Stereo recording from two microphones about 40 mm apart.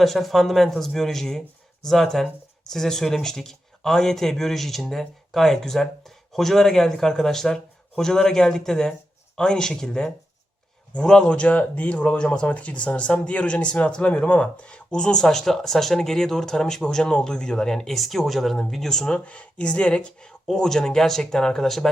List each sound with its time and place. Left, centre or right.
0.0 s a man's voice: centre; by 11.3 s left
11.3 s speech: left; by 17.9 s centre
17.9 s speech: centre
19.2 s speech: left; by 21.8 s centre